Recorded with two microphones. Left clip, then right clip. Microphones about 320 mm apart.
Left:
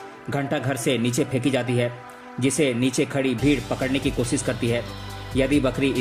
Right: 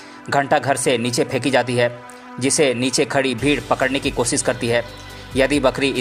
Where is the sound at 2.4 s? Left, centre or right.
Centre.